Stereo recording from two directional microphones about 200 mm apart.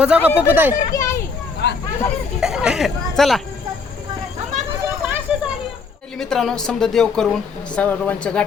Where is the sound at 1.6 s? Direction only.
60° left (ahead or behind).